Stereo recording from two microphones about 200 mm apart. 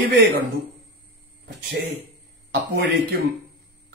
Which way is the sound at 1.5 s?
55° right (ahead or behind).